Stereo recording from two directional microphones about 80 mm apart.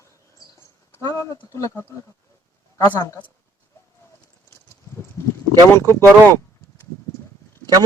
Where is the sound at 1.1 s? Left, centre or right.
Left.